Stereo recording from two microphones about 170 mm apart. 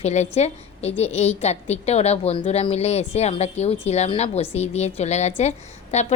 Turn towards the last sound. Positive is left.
turn(degrees=40)  # may be behind; listen again after turning